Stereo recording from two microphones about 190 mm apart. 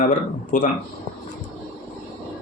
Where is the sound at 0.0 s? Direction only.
40° left (ahead or behind).